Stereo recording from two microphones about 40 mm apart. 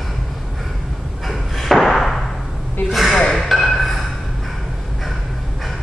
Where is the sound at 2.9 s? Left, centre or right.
Centre.